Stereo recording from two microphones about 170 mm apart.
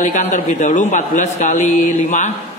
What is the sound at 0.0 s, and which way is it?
A man's voice, 45° left (ahead or behind).